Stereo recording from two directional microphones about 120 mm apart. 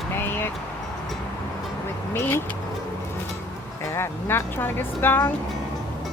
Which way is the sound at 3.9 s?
20° left (ahead or behind).